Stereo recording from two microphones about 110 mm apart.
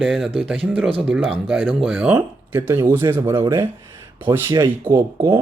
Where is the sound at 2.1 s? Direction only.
15° right (ahead or behind).